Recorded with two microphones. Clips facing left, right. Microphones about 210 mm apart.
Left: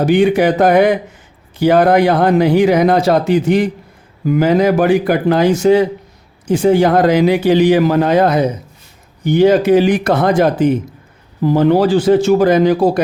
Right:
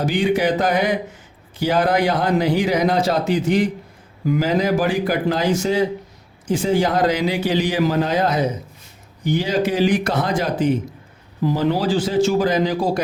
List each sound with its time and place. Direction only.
0.0 s a man's voice: 60° left (ahead or behind)